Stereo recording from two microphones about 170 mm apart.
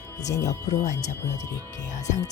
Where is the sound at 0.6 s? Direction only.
45° left (ahead or behind).